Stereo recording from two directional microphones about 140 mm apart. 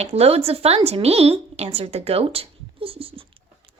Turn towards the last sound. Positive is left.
turn(degrees=-40)  # may be behind; listen again after turning